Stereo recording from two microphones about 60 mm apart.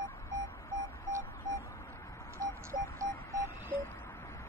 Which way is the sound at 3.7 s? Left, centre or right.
Left.